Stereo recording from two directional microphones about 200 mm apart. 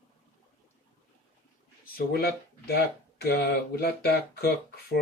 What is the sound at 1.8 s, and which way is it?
Speech, 50° left (ahead or behind).